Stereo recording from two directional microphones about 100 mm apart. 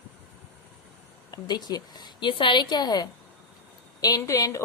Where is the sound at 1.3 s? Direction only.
45° left (ahead or behind).